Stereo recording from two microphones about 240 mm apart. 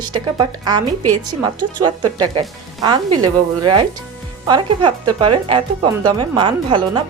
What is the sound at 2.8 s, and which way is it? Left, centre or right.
Speech, centre.